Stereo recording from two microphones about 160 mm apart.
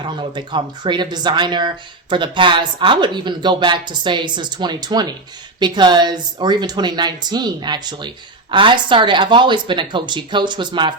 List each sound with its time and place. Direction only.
0.0 s speech: 30° right (ahead or behind)